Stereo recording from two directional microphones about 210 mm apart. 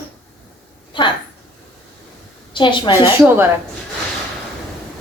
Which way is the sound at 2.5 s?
20° left (ahead or behind).